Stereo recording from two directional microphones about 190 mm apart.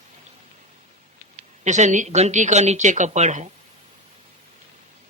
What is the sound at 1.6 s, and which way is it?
Speech, 40° right (ahead or behind).